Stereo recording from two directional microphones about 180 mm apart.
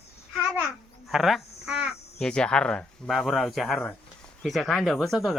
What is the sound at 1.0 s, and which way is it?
Speech, centre (ahead or behind).